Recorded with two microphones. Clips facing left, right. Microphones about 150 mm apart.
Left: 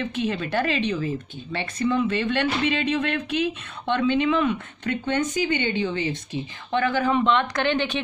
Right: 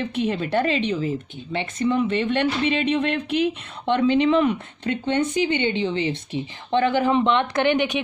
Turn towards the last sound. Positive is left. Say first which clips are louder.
# right 3 dB
turn(degrees=-15)  # may be behind; listen again after turning